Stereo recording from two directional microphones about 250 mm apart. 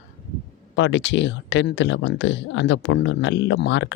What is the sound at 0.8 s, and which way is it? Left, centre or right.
Speech, left.